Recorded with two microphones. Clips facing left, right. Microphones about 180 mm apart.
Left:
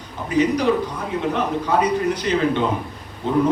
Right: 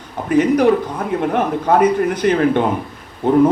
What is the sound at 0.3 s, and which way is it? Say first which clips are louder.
A man's voice: right 5 dB; 50° right (ahead or behind).